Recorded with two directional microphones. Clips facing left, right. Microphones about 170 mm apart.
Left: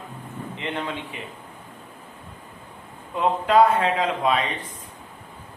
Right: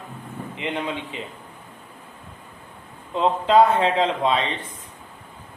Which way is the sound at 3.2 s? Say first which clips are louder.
Right 1 dB; 25° right (ahead or behind).